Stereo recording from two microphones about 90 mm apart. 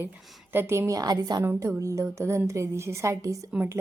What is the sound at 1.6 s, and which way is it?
A woman's voice, 35° right (ahead or behind).